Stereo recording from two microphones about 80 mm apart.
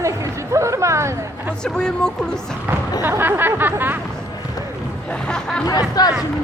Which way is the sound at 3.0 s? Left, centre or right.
Right.